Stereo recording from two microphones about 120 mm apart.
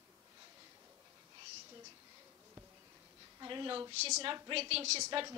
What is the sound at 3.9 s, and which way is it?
A woman's voice, 60° right (ahead or behind).